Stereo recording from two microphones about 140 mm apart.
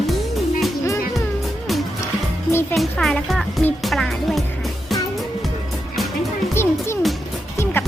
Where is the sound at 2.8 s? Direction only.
5° left (ahead or behind).